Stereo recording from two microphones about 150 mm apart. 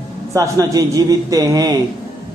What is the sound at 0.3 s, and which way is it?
A man's voice, 20° right (ahead or behind).